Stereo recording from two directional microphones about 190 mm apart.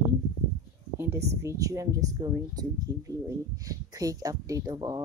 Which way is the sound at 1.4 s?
15° right (ahead or behind).